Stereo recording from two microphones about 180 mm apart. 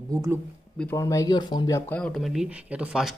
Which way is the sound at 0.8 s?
15° left (ahead or behind).